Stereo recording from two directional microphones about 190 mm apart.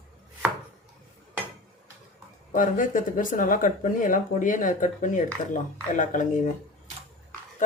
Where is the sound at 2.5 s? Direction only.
45° left (ahead or behind).